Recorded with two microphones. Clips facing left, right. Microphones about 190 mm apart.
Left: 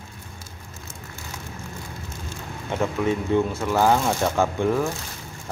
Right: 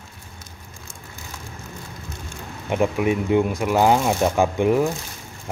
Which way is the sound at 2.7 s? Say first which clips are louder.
Right 3 dB; 15° right (ahead or behind).